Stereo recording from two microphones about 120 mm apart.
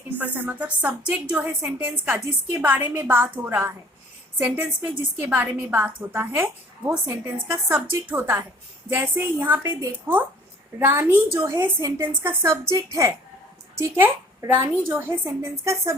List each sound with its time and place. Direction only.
0.2 s a woman's voice: 15° right (ahead or behind)